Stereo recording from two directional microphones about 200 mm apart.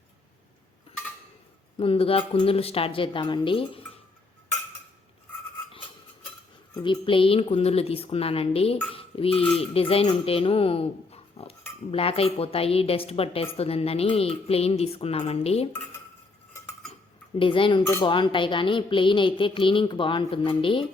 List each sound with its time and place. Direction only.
1.8 s speech: 30° left (ahead or behind)
6.7 s speech: 20° left (ahead or behind)
8.9 s cutlery: 25° left (ahead or behind)
9.6 s speech: 30° left (ahead or behind)
17.3 s speech: 25° left (ahead or behind)